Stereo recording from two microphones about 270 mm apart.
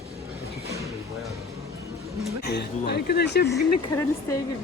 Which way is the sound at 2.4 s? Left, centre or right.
Left.